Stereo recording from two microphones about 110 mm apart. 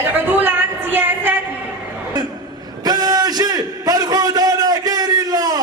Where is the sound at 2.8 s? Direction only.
35° right (ahead or behind).